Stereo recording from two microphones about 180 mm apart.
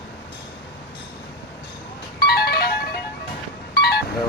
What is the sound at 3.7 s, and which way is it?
Vehicle, 65° left (ahead or behind).